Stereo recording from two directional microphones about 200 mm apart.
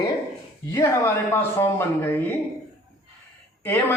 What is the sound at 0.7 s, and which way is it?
Speech, 15° left (ahead or behind).